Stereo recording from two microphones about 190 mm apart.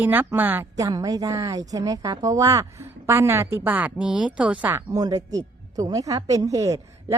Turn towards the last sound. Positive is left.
turn(degrees=-15)  # may be behind; listen again after turning